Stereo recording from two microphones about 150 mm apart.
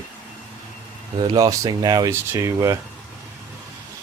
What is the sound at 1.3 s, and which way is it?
Speech, 25° right (ahead or behind).